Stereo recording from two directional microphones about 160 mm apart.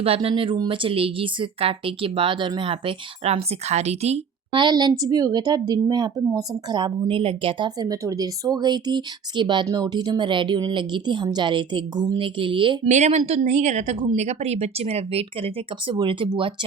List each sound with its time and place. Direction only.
0.0 s speech: 35° right (ahead or behind)
4.5 s a woman's voice: 25° right (ahead or behind)
12.9 s speech: 45° right (ahead or behind)